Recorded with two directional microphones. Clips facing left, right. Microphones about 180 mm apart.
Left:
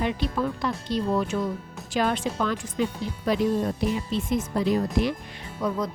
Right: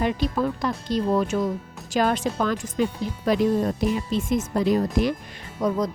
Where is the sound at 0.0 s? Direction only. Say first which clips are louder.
Right 3 dB; 45° right (ahead or behind).